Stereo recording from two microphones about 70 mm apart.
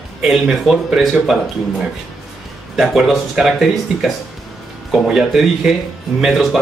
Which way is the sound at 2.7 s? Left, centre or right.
Centre.